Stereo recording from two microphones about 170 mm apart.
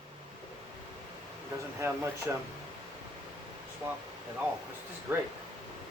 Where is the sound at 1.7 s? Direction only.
15° right (ahead or behind).